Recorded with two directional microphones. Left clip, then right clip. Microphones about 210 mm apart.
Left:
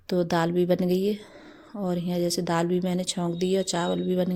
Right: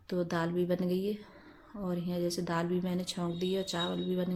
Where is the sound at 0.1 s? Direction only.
40° left (ahead or behind).